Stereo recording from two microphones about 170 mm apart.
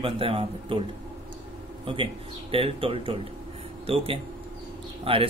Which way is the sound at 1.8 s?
30° right (ahead or behind).